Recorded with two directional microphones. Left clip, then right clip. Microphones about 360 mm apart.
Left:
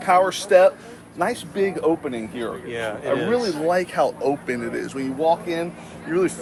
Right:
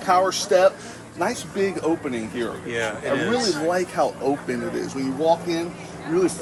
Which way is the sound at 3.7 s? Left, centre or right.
Left.